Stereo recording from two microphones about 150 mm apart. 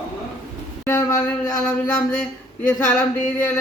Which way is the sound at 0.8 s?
20° left (ahead or behind).